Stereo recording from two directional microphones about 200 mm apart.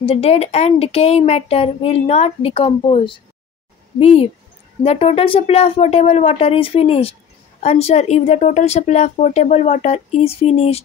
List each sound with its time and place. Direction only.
0.0 s speech: 30° left (ahead or behind)